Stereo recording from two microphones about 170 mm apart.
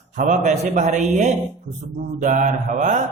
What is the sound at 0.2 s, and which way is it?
A man's voice, 45° right (ahead or behind).